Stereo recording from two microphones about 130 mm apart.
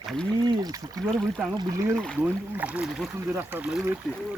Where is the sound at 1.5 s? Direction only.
30° right (ahead or behind).